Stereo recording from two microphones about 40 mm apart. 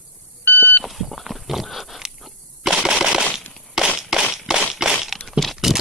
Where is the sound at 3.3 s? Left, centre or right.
Centre.